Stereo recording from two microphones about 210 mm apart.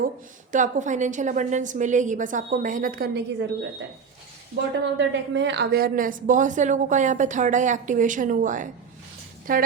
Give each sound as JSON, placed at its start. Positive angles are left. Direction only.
{"t": 0.5, "sound": "a woman's voice", "side_deg": -35}
{"t": 4.7, "sound": "a woman's voice", "side_deg": -60}